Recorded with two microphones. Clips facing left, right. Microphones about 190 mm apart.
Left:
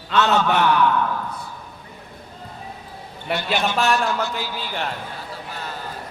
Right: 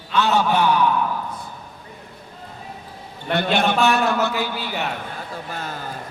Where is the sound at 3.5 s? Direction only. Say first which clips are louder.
Right 2 dB; 60° right (ahead or behind).